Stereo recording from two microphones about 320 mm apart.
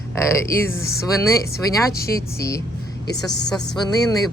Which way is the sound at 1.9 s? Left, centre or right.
Left.